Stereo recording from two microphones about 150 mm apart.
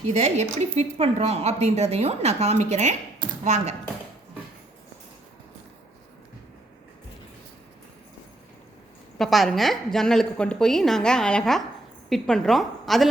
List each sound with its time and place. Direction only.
0.1 s speech: 45° right (ahead or behind)
9.1 s a woman's voice: centre (ahead or behind)